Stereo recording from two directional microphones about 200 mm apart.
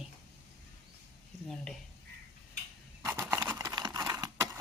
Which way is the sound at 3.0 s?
10° right (ahead or behind).